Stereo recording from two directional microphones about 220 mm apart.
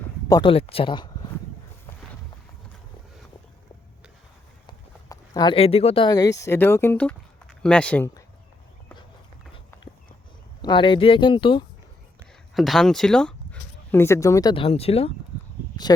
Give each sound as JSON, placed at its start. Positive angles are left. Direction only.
{"t": 0.3, "sound": "speech", "side_deg": 20}
{"t": 4.6, "sound": "speech", "side_deg": 15}
{"t": 10.6, "sound": "speech", "side_deg": 20}
{"t": 12.5, "sound": "speech", "side_deg": 0}